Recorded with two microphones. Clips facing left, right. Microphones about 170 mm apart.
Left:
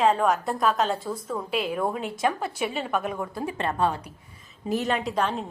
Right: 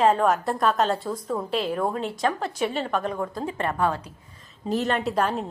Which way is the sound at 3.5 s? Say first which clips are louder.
Even; 20° left (ahead or behind).